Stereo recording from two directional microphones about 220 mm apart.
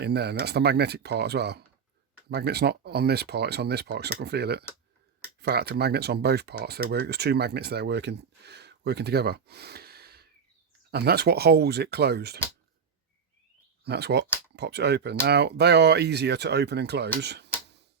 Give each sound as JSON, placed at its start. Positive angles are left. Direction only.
{"t": 0.0, "sound": "speech", "side_deg": -50}
{"t": 13.8, "sound": "speech", "side_deg": -50}